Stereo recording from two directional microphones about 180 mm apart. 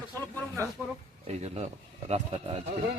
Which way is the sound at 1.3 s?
35° right (ahead or behind).